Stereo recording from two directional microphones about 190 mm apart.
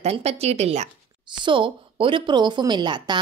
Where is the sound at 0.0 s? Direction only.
35° right (ahead or behind).